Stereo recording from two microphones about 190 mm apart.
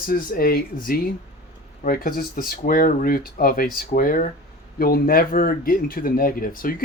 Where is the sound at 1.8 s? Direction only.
45° left (ahead or behind).